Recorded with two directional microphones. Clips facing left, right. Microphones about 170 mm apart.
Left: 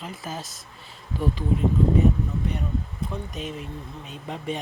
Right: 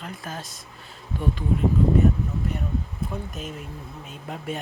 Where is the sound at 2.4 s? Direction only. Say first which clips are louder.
Even; 5° right (ahead or behind).